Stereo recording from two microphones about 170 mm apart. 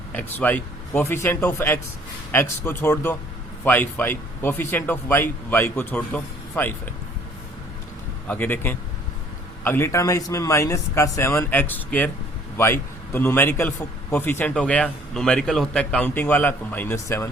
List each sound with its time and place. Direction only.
0.1 s a man's voice: 10° left (ahead or behind)
8.3 s a man's voice: 10° left (ahead or behind)